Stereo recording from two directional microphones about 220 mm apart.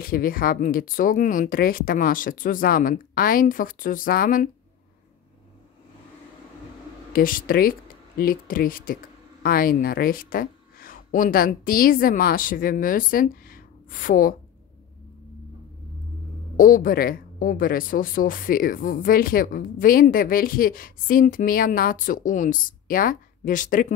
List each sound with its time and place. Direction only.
0.0 s a woman's voice: 40° left (ahead or behind)
7.1 s speech: 40° left (ahead or behind)
16.5 s a woman's voice: 40° left (ahead or behind)